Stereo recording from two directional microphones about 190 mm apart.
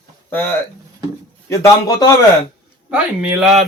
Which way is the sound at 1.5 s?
15° left (ahead or behind).